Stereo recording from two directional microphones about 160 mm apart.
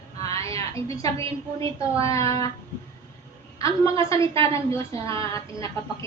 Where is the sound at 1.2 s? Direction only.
35° right (ahead or behind).